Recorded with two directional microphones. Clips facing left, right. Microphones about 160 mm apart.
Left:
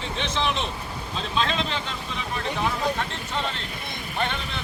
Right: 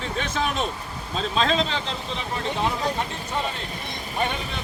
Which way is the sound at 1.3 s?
35° right (ahead or behind).